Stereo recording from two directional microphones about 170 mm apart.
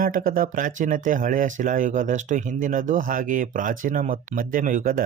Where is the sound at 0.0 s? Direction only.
55° right (ahead or behind).